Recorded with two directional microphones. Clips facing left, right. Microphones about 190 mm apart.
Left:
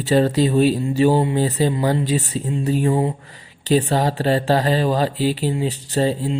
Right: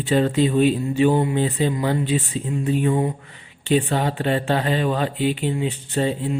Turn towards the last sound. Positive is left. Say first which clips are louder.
# left 2 dB
turn(degrees=35)  # may be behind; listen again after turning